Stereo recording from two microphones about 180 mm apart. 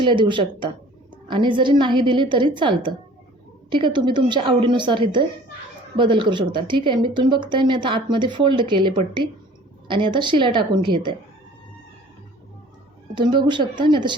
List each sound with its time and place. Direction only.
0.0 s a woman's voice: 25° right (ahead or behind)
13.1 s a woman's voice: 25° right (ahead or behind)